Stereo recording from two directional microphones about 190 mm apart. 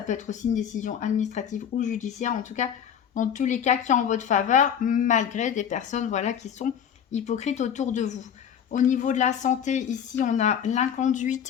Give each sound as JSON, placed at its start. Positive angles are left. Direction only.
{"t": 0.1, "sound": "speech", "side_deg": 40}